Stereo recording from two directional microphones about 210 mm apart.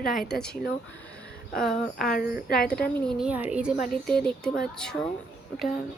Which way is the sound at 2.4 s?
45° left (ahead or behind).